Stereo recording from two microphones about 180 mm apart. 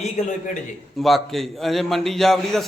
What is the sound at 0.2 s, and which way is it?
Speech, 40° left (ahead or behind).